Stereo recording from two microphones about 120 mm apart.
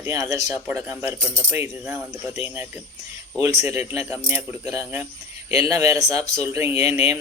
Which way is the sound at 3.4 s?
25° right (ahead or behind).